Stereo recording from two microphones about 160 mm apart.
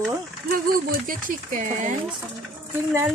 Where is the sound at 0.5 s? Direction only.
65° right (ahead or behind).